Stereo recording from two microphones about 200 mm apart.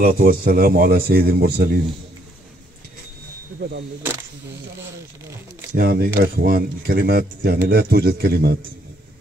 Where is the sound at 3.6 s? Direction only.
55° right (ahead or behind).